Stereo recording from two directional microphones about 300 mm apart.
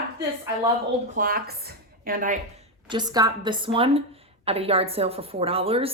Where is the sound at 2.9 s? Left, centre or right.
Centre.